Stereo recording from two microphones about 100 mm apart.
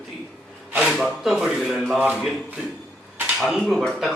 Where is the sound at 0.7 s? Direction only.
5° right (ahead or behind).